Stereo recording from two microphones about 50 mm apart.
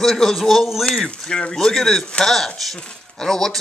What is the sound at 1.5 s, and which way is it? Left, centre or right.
Speech, centre.